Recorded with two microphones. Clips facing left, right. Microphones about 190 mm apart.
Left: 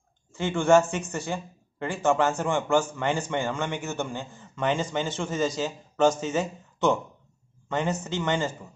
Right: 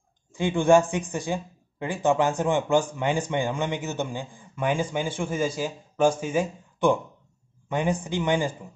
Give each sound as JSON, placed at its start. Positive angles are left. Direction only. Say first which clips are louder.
{"t": 0.3, "sound": "speech", "louder": "right 1 dB", "side_deg": -15}